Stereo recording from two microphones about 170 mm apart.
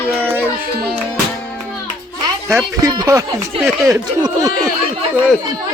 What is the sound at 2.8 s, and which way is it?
Speech, 20° right (ahead or behind).